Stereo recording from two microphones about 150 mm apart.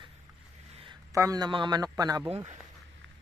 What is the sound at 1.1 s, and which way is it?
A man's voice, 25° right (ahead or behind).